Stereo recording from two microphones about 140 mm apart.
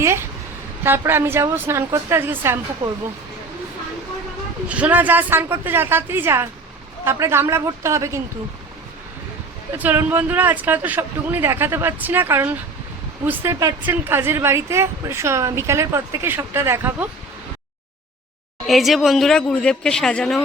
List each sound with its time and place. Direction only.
0.0 s a sound: 20° right (ahead or behind)
0.9 s speech: 15° right (ahead or behind)
4.7 s a woman's voice: 10° right (ahead or behind)
9.7 s a woman's voice: 15° right (ahead or behind)
18.6 s speech: centre (ahead or behind)